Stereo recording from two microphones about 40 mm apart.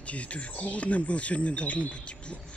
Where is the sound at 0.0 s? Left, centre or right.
Left.